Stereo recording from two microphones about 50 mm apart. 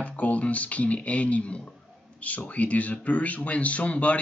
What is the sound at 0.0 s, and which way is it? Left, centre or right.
Speech, left.